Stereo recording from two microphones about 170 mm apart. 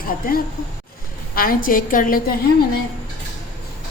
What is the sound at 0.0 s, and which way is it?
A woman's voice, 60° left (ahead or behind).